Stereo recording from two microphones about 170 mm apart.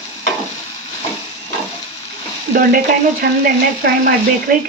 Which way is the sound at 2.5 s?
55° right (ahead or behind).